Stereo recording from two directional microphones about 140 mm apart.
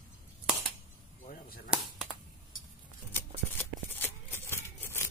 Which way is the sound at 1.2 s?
90° left.